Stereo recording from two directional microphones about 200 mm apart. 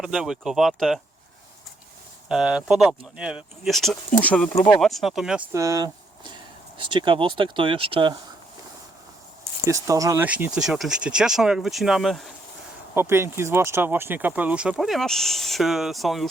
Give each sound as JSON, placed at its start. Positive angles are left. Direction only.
{"t": 0.0, "sound": "speech", "side_deg": 0}
{"t": 2.3, "sound": "speech", "side_deg": -5}
{"t": 5.5, "sound": "speech", "side_deg": -15}
{"t": 9.6, "sound": "speech", "side_deg": -15}
{"t": 12.9, "sound": "speech", "side_deg": -10}